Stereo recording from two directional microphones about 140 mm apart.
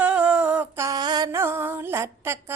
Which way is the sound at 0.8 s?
30° right (ahead or behind).